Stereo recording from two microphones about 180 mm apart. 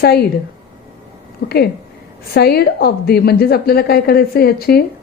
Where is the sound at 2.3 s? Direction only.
60° left (ahead or behind).